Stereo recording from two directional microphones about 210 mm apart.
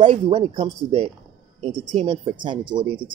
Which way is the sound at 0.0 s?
25° right (ahead or behind).